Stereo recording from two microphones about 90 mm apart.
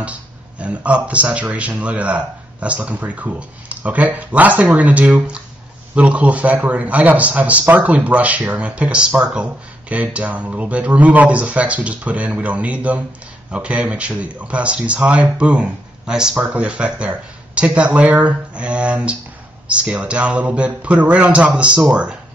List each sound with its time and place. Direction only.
0.0 s speech: 15° right (ahead or behind)